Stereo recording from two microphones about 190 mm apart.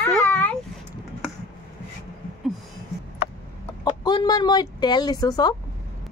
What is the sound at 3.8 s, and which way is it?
Speech, 20° left (ahead or behind).